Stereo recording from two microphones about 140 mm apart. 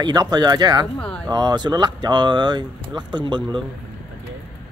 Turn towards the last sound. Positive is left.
turn(degrees=-30)  # may be behind; listen again after turning